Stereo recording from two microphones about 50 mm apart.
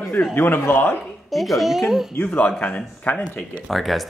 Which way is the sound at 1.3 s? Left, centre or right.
Centre.